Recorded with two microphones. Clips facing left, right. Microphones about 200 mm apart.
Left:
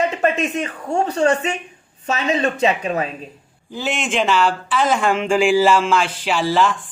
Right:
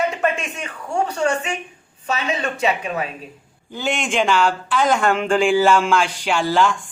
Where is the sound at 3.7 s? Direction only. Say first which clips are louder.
Even; 5° left (ahead or behind).